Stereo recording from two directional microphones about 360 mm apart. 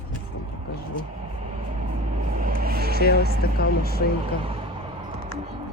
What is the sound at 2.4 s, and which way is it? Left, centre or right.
Vehicle, right.